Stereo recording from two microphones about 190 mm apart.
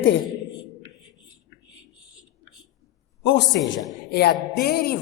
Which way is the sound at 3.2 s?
65° left (ahead or behind).